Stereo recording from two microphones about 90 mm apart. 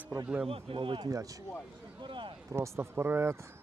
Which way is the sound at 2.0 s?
65° right (ahead or behind).